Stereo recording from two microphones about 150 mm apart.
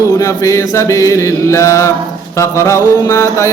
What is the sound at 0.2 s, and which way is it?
Mantra, 20° left (ahead or behind).